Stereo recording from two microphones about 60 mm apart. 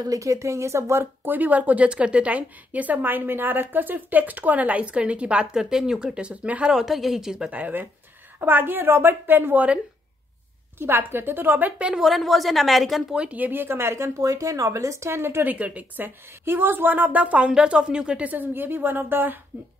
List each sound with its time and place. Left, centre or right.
0.0 s speech: right
6.7 s speech: centre
7.5 s speech: right
10.8 s speech: right
11.8 s a woman's voice: centre
13.1 s speech: right
15.4 s speech: right
16.4 s speech: right